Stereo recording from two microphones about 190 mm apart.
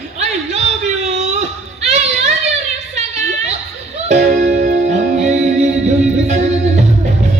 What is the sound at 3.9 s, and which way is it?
Music, 35° right (ahead or behind).